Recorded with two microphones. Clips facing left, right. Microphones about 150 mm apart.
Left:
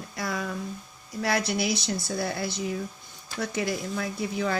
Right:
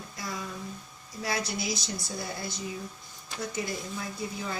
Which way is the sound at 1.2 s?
65° left (ahead or behind).